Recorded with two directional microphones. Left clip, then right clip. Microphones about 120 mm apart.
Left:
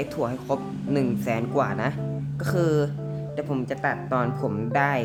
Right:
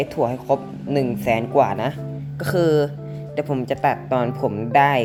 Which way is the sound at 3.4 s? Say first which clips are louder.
Right 7 dB; 35° right (ahead or behind).